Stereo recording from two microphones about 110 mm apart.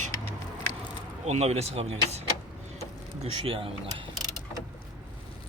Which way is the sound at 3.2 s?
65° right (ahead or behind).